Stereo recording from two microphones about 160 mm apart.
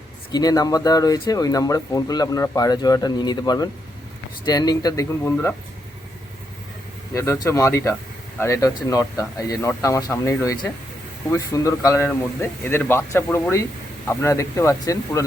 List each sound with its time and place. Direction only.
0.3 s speech: 25° left (ahead or behind)
7.1 s speech: 20° left (ahead or behind)